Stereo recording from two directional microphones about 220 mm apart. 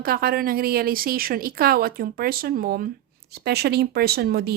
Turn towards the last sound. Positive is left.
turn(degrees=-45)  # may be behind; listen again after turning